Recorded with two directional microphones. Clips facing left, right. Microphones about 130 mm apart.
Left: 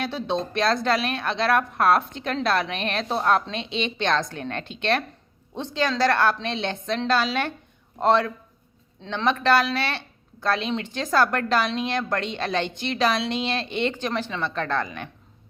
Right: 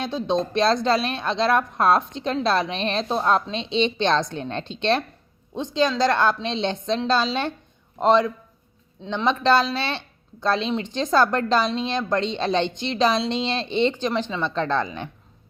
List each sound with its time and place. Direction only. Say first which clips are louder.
0.0 s a woman's voice: right 3 dB; 15° right (ahead or behind)